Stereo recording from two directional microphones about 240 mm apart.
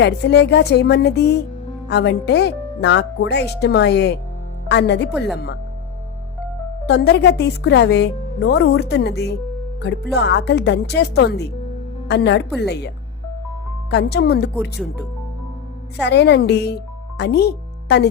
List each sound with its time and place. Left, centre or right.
0.0 s speech: left
6.8 s speech: left
13.9 s speech: left
16.0 s speech: left